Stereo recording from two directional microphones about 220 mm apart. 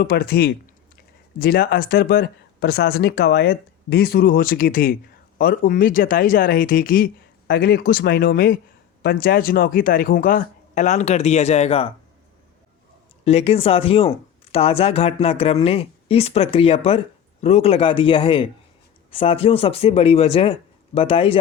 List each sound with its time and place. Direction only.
0.0 s speech: 45° left (ahead or behind); by 11.9 s 25° left (ahead or behind)
13.2 s speech: 25° left (ahead or behind)